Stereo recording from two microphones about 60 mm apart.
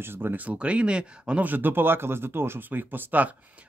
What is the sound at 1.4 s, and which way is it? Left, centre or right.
Speech, right.